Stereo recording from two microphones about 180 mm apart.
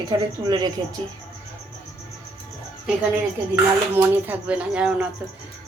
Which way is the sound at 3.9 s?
10° right (ahead or behind).